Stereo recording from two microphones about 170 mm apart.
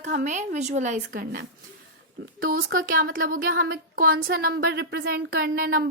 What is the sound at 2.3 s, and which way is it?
Speech, 60° right (ahead or behind).